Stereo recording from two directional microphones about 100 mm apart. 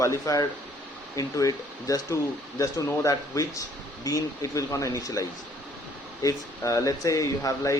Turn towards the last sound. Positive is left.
turn(degrees=35)  # may be behind; listen again after turning